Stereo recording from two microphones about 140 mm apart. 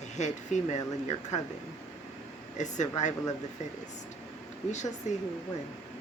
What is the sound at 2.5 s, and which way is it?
Speech, 60° left (ahead or behind).